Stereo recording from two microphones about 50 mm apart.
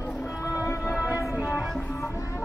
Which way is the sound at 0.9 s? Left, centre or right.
Right.